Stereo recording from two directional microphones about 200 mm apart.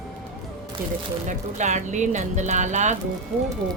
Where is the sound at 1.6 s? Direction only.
35° right (ahead or behind).